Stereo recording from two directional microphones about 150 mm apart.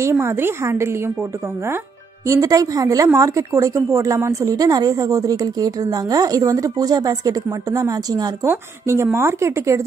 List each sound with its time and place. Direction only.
0.0 s speech: 15° right (ahead or behind)
2.2 s a woman's voice: 20° right (ahead or behind)